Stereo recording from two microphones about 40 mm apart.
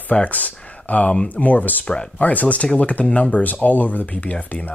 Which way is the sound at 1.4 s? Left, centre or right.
Left.